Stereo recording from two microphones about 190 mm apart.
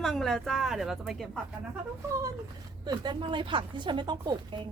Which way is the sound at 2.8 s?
25° right (ahead or behind).